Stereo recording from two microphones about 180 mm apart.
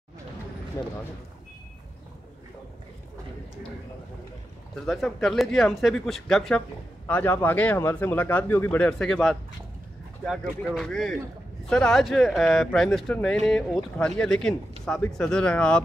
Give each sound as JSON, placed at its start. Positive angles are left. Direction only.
{"t": 0.8, "sound": "speech", "side_deg": 20}
{"t": 4.8, "sound": "speech", "side_deg": 0}
{"t": 10.7, "sound": "speech", "side_deg": 0}